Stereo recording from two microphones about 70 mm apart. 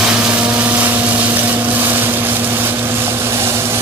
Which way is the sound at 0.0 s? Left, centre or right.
Centre.